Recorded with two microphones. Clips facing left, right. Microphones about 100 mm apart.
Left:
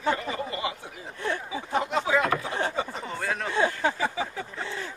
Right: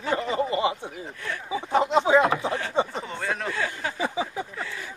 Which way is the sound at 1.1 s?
30° left (ahead or behind).